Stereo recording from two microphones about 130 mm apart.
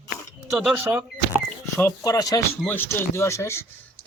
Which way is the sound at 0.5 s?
10° right (ahead or behind).